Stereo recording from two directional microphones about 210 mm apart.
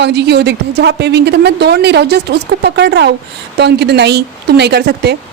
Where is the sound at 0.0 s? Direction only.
55° right (ahead or behind).